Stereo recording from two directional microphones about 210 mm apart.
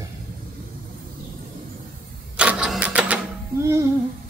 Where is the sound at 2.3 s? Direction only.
5° right (ahead or behind).